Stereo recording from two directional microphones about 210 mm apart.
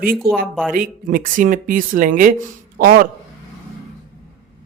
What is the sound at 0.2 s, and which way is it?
Speech, centre (ahead or behind).